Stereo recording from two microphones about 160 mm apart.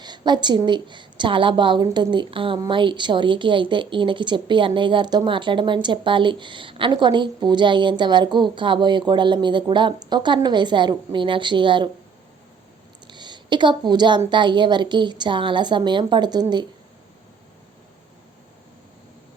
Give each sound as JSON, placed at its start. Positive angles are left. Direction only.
{"t": 0.0, "sound": "a woman's voice", "side_deg": -25}
{"t": 13.1, "sound": "a sound", "side_deg": -30}
{"t": 14.3, "sound": "a woman's voice", "side_deg": -30}